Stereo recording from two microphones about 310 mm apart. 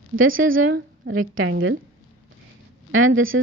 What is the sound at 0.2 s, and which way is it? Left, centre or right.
A woman's voice, right.